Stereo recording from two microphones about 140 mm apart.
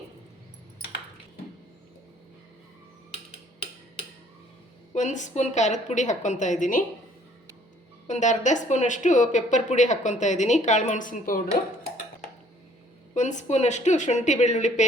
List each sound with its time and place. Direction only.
4.9 s speech: 60° left (ahead or behind)
8.0 s speech: 60° left (ahead or behind); by 11.4 s 80° left
13.1 s speech: 60° left (ahead or behind)